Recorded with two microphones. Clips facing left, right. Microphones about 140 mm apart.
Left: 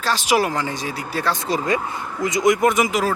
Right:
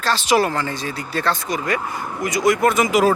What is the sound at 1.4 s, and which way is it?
Speech, 25° left (ahead or behind).